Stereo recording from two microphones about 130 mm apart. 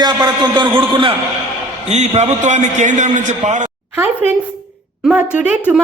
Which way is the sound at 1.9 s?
60° right (ahead or behind).